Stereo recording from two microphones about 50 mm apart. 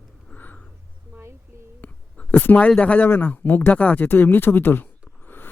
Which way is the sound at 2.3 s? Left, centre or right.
Left.